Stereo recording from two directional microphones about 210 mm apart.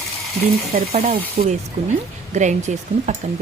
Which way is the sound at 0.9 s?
30° right (ahead or behind).